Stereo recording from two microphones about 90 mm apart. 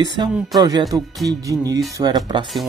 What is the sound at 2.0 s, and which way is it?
Speech, 55° right (ahead or behind).